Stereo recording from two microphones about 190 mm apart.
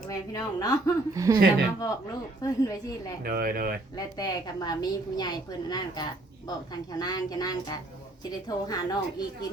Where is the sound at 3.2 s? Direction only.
50° right (ahead or behind).